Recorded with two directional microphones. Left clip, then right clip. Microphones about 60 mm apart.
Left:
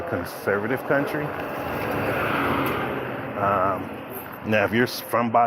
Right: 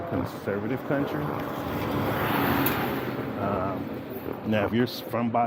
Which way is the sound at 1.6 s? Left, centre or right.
Right.